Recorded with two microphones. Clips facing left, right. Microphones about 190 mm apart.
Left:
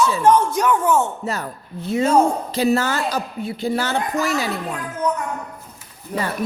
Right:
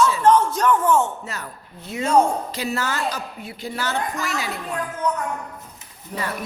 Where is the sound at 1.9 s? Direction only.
30° left (ahead or behind).